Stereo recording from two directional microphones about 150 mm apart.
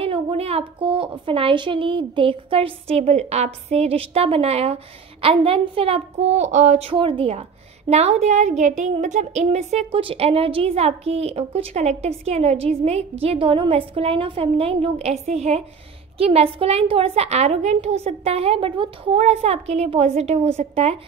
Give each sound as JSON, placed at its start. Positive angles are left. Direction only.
{"t": 0.0, "sound": "a woman's voice", "side_deg": -40}
{"t": 6.9, "sound": "a woman's voice", "side_deg": -35}